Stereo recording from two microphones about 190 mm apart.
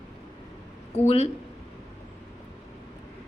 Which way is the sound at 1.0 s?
35° left (ahead or behind).